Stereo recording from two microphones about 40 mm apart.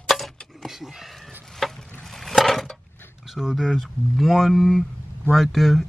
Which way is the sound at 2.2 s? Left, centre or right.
Centre.